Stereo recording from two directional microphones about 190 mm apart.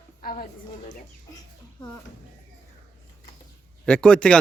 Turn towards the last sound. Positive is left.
turn(degrees=5)  # may be behind; listen again after turning